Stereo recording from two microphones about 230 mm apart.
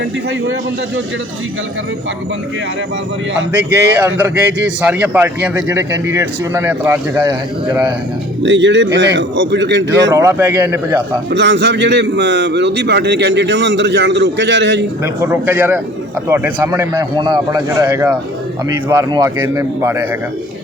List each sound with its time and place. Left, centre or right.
3.7 s a man's voice: centre
8.4 s a man's voice: right
10.1 s a man's voice: centre
11.3 s a man's voice: right
15.0 s a man's voice: centre